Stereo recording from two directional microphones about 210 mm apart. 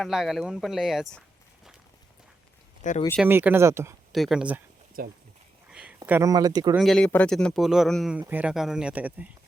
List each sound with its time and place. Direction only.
0.0 s speech: centre (ahead or behind)
2.8 s speech: 35° left (ahead or behind)
3.2 s speech: 10° right (ahead or behind)
4.1 s speech: centre (ahead or behind)
5.0 s speech: 40° right (ahead or behind)
5.7 s a sound: 5° right (ahead or behind)
6.0 s speech: 15° right (ahead or behind)
6.7 s speech: centre (ahead or behind)